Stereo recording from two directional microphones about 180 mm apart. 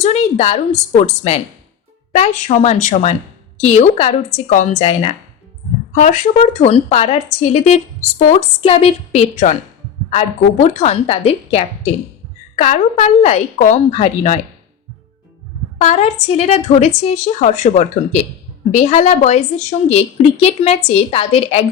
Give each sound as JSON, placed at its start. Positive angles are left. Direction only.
{"t": 0.0, "sound": "a woman's voice", "side_deg": 35}
{"t": 15.8, "sound": "a woman's voice", "side_deg": 40}